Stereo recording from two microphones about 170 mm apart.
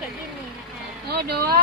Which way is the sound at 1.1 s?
65° right (ahead or behind).